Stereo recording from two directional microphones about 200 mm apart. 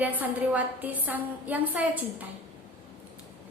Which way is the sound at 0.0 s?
10° right (ahead or behind).